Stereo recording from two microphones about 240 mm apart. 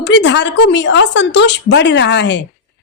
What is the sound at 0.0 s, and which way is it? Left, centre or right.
A woman's voice, left.